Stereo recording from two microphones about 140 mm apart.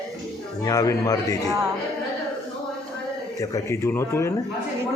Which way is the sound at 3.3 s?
20° left (ahead or behind).